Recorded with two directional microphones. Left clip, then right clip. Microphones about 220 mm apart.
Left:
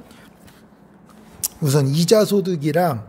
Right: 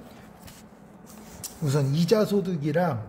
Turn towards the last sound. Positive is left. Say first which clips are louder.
# left 7 dB
turn(degrees=45)  # may be behind; listen again after turning